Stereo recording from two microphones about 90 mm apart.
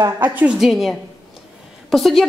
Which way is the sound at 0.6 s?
Centre (ahead or behind).